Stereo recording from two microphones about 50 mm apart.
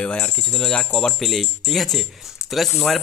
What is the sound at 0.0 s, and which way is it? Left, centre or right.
Speech, left.